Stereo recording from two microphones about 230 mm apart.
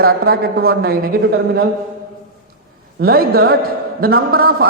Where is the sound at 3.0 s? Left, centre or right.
Right.